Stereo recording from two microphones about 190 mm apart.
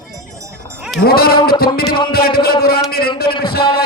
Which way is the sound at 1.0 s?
55° left (ahead or behind).